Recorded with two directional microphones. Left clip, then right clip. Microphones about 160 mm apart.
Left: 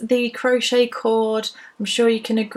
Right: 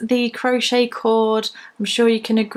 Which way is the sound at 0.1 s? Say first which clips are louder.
Left 1 dB; 30° right (ahead or behind).